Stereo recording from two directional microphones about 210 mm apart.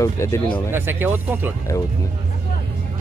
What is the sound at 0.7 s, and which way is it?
Speech, 10° right (ahead or behind).